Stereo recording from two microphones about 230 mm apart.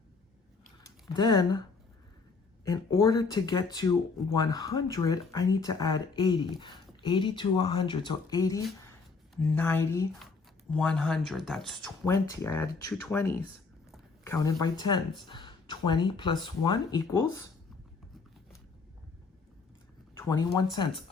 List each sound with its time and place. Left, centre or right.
1.1 s speech: centre
2.6 s speech: centre
12.3 s speech: centre
20.1 s speech: centre